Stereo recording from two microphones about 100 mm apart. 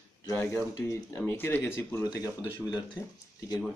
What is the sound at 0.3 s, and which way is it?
A man's voice, 30° left (ahead or behind).